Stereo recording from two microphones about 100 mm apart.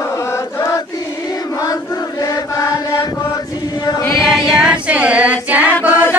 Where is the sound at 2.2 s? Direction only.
35° left (ahead or behind).